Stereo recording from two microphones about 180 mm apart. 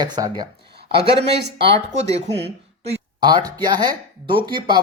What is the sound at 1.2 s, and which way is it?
Speech, 70° right (ahead or behind).